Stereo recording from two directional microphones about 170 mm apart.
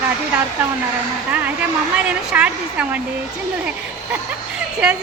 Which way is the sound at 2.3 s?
5° right (ahead or behind).